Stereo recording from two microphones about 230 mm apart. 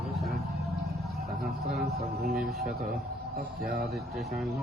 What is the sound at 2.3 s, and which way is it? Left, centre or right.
Speech, centre.